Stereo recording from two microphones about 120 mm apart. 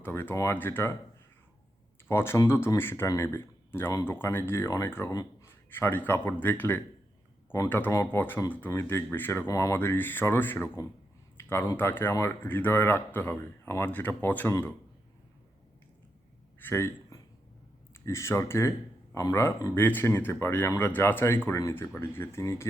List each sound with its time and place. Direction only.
0.0 s speech: 20° left (ahead or behind)
2.0 s speech: 20° left (ahead or behind)
9.5 s speech: 25° left (ahead or behind)
11.3 s a sound: 20° left (ahead or behind)
11.8 s speech: 20° left (ahead or behind)
16.6 s a sound: 20° left (ahead or behind)
17.9 s speech: 25° left (ahead or behind)